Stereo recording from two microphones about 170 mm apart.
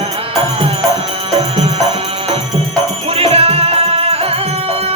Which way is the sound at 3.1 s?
35° right (ahead or behind).